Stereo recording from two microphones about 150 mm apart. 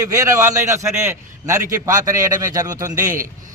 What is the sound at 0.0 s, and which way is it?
A man's voice, 20° right (ahead or behind).